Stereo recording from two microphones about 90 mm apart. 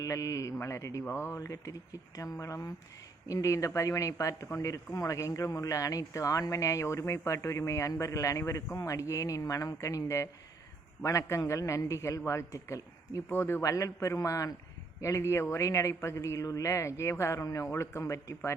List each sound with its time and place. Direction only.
0.0 s speech: 40° left (ahead or behind)
1.4 s speech: 40° left (ahead or behind)